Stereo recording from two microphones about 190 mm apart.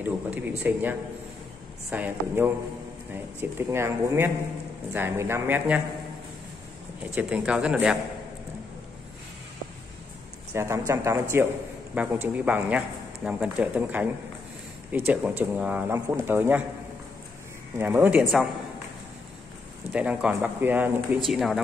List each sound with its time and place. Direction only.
0.0 s speech: 10° right (ahead or behind)
7.0 s a man's voice: 5° right (ahead or behind)
10.5 s a man's voice: 15° right (ahead or behind)
17.7 s speech: 10° right (ahead or behind)
18.2 s a man's voice: centre (ahead or behind)
19.9 s a man's voice: 5° right (ahead or behind)